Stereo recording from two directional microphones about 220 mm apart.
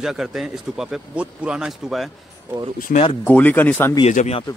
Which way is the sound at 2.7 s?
40° left (ahead or behind).